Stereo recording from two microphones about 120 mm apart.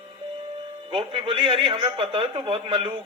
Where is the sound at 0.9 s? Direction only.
50° right (ahead or behind).